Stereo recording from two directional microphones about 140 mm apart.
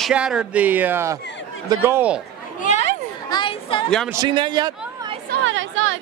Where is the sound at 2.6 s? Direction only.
60° left (ahead or behind).